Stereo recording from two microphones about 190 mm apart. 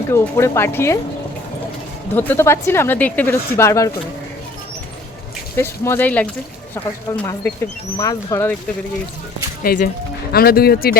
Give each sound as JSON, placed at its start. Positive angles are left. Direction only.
{"t": 0.1, "sound": "speech", "side_deg": 15}
{"t": 2.1, "sound": "speech", "side_deg": 10}
{"t": 5.5, "sound": "speech", "side_deg": 15}
{"t": 9.6, "sound": "speech", "side_deg": 50}